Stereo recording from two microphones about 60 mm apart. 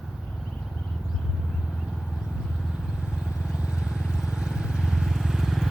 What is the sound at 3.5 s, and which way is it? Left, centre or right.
Vehicle, centre.